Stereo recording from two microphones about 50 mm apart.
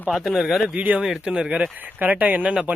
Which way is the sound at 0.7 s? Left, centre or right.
Right.